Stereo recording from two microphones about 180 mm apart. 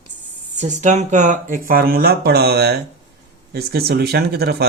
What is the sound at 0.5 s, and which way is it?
Speech, 40° right (ahead or behind).